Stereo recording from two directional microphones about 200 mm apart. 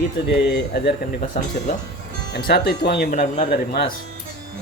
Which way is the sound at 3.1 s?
40° left (ahead or behind).